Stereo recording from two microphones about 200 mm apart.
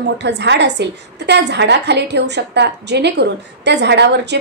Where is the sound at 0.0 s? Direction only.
60° right (ahead or behind).